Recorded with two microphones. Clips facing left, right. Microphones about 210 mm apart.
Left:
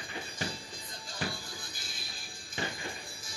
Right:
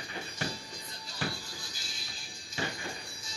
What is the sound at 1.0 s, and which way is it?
Music, 50° left (ahead or behind).